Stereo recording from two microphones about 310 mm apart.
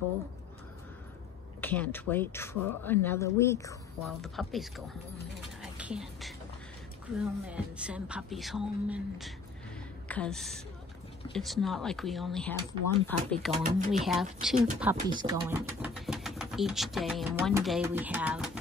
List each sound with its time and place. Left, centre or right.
1.6 s speech: centre
5.6 s a sound: centre
7.2 s speech: centre
13.6 s speech: right
14.0 s speech: centre